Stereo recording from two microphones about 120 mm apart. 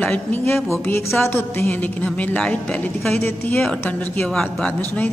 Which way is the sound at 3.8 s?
15° left (ahead or behind).